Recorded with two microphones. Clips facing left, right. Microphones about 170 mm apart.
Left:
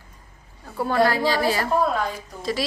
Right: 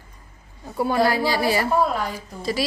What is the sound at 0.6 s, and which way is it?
A woman's voice, 10° right (ahead or behind).